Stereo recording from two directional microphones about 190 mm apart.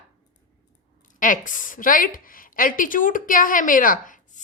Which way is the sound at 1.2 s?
45° left (ahead or behind).